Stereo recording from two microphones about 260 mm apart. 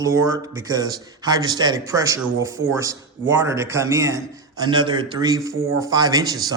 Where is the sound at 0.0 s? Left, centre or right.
Centre.